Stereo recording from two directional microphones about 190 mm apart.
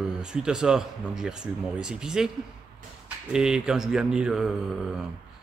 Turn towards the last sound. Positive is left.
turn(degrees=0)  # may be behind; listen again after turning